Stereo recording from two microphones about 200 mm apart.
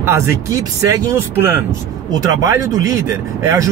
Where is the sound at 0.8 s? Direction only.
15° right (ahead or behind).